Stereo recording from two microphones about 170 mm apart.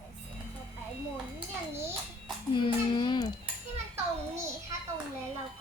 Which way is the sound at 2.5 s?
25° left (ahead or behind).